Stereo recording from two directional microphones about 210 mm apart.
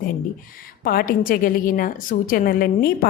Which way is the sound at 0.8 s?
45° left (ahead or behind).